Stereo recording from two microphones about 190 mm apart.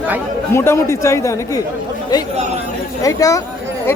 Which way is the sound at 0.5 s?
15° left (ahead or behind).